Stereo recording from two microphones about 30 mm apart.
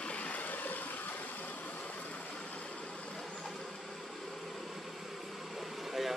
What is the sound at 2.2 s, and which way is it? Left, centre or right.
Vehicle, left.